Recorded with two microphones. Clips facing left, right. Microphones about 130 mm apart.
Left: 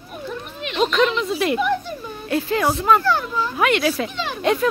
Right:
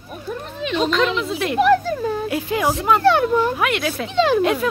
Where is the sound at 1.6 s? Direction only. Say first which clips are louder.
Right 6 dB; 90° right.